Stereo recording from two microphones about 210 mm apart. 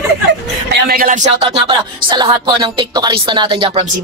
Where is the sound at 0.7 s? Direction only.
45° right (ahead or behind).